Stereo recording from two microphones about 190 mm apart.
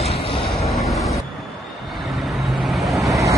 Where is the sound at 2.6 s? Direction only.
Centre (ahead or behind).